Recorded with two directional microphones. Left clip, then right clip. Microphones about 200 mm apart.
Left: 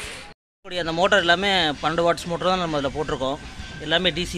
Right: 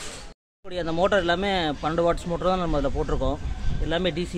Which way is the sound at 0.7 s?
Centre (ahead or behind).